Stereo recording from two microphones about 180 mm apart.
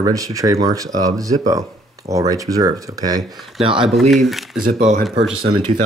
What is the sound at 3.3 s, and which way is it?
Speech, centre (ahead or behind).